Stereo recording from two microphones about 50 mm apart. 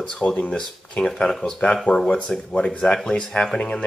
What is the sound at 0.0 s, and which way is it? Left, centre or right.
Speech, centre.